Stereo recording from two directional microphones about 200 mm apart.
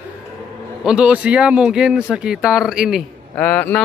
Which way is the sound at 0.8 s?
5° right (ahead or behind).